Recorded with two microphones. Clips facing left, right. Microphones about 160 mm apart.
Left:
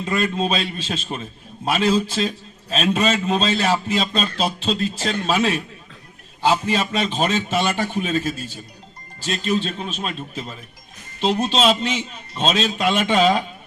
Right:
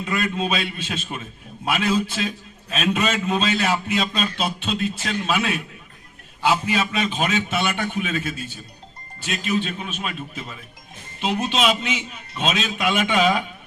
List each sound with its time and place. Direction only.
0.0 s a man's voice: 30° left (ahead or behind)